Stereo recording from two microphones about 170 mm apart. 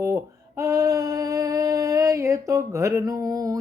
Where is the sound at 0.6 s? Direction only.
15° right (ahead or behind).